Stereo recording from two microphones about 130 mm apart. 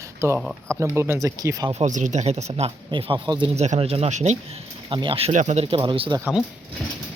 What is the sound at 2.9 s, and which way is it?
Speech, 40° right (ahead or behind).